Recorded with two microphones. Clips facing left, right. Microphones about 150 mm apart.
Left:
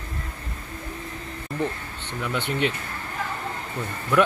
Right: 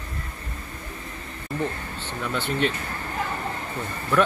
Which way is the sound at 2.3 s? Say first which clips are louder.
Even; 15° left (ahead or behind).